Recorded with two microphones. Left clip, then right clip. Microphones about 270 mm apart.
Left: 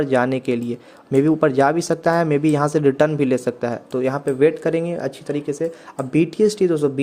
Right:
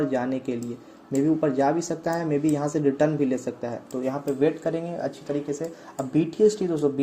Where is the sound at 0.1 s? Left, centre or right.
Left.